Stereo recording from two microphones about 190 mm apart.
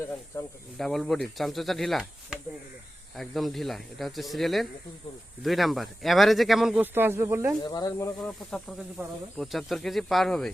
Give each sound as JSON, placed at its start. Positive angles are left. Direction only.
{"t": 0.3, "sound": "speech", "side_deg": 20}
{"t": 0.8, "sound": "speech", "side_deg": 0}
{"t": 7.6, "sound": "speech", "side_deg": 20}
{"t": 8.2, "sound": "speech", "side_deg": 5}